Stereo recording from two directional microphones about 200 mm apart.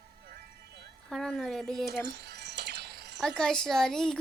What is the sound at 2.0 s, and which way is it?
Music, 55° right (ahead or behind).